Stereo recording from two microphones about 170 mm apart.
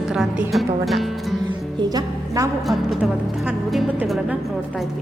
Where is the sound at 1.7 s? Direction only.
25° right (ahead or behind).